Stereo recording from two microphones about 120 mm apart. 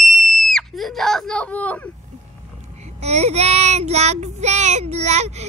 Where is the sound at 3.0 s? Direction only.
65° right (ahead or behind).